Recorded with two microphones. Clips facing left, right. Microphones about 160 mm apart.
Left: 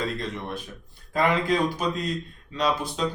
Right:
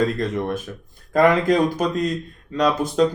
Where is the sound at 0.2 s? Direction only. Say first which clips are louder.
Right 9 dB; 45° right (ahead or behind).